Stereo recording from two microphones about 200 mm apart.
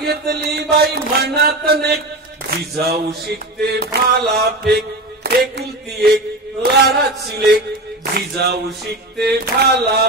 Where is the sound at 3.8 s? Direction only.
50° right (ahead or behind).